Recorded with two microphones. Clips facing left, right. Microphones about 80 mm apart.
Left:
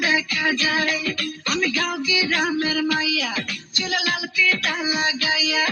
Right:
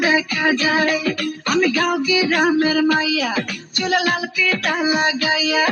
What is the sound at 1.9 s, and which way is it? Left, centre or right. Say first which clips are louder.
Music: right 6 dB; right.